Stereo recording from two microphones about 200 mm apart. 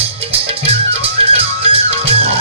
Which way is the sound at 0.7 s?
30° right (ahead or behind).